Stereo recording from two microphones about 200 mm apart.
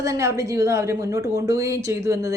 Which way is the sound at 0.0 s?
15° right (ahead or behind).